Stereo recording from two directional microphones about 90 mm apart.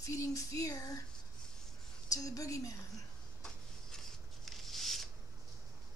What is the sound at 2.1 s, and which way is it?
Speech, 40° left (ahead or behind).